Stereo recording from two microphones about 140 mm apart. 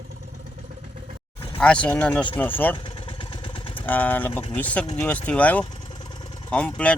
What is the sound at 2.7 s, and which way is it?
Vehicle, 40° left (ahead or behind).